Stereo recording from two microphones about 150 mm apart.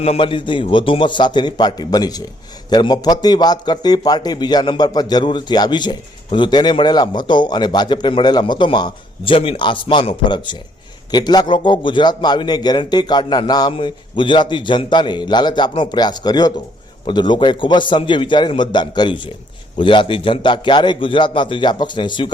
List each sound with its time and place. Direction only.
0.0 s a man's voice: 40° left (ahead or behind)